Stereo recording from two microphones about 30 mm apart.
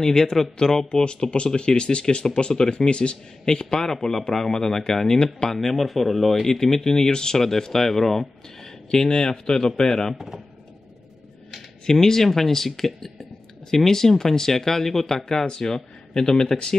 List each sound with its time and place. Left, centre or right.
0.0 s speech: centre
0.8 s speech: left
3.4 s speech: left
5.5 s speech: centre
6.4 s speech: centre
7.3 s speech: centre
8.9 s speech: left
10.1 s speech: centre
11.8 s speech: centre